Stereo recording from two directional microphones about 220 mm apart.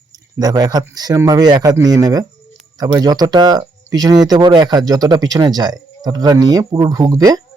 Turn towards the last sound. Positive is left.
turn(degrees=-15)  # may be behind; listen again after turning